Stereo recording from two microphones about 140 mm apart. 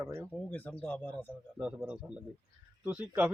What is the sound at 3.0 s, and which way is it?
Speech, 10° right (ahead or behind).